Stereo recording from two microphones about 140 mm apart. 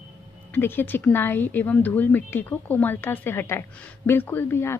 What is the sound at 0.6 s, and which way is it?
A woman's voice, 15° left (ahead or behind).